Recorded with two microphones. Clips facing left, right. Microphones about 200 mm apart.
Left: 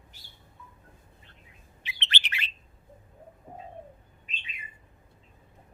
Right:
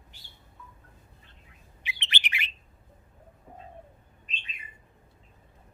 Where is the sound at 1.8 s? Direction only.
15° right (ahead or behind).